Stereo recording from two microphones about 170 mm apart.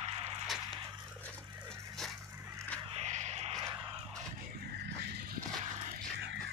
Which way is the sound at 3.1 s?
40° right (ahead or behind).